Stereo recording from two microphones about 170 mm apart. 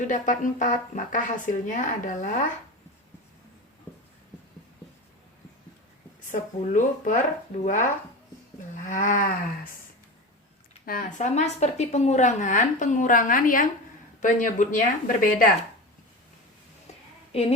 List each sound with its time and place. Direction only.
0.0 s a woman's voice: 50° left (ahead or behind)
6.3 s a woman's voice: 50° left (ahead or behind)
8.9 s a woman's voice: 50° left (ahead or behind)
10.8 s a woman's voice: 50° left (ahead or behind)